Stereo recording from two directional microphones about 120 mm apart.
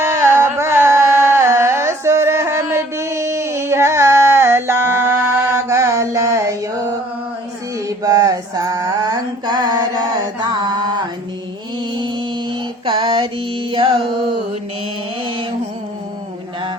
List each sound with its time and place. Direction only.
0.0 s a sound: 25° right (ahead or behind)
0.6 s music: 25° right (ahead or behind)
7.9 s mantra: 30° right (ahead or behind); by 14.3 s 45° right (ahead or behind)